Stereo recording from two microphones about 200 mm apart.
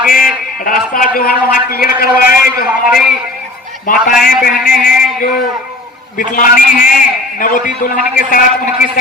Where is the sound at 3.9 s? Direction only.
45° left (ahead or behind).